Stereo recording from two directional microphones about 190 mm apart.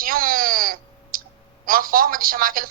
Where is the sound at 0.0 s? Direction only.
50° right (ahead or behind).